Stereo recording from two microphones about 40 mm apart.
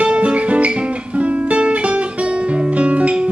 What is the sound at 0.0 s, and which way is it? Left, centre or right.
Guitar, right.